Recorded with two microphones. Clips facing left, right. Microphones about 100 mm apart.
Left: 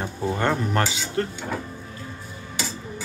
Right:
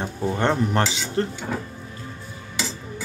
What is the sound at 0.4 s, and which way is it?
Speech, 25° right (ahead or behind).